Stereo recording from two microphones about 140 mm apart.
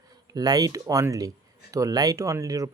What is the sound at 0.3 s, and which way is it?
Speech, 30° right (ahead or behind).